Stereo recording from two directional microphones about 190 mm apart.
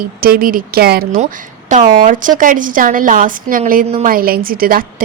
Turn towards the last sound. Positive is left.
turn(degrees=-50)  # may be behind; listen again after turning